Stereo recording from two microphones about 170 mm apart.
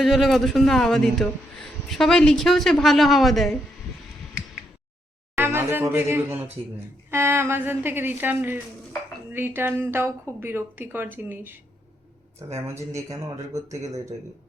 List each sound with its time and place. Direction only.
0.0 s a woman's voice: centre (ahead or behind)
5.4 s a woman's voice: 15° right (ahead or behind)
12.5 s a woman's voice: 15° right (ahead or behind)